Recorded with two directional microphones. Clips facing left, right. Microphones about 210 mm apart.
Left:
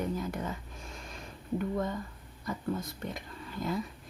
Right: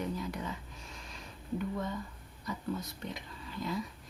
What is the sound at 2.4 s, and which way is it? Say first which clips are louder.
Speech: left 3 dB; 50° left (ahead or behind).